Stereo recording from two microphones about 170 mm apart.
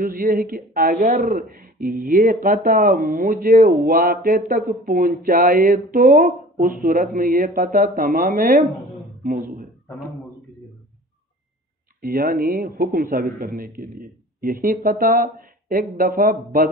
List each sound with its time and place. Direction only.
0.0 s speech: 55° right (ahead or behind)
12.0 s speech: 60° right (ahead or behind)